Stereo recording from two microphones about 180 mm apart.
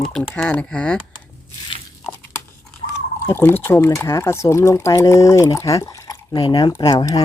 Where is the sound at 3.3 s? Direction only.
15° left (ahead or behind).